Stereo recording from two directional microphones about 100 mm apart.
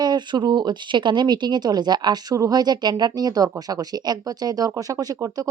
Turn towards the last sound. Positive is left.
turn(degrees=-35)  # may be behind; listen again after turning